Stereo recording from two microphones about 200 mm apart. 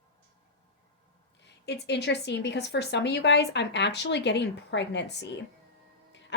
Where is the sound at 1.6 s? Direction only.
55° left (ahead or behind).